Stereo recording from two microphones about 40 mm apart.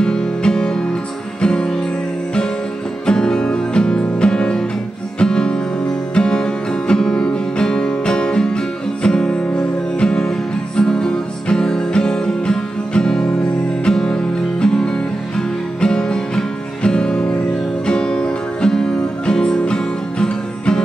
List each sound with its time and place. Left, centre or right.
0.0 s music: left
3.1 s music: left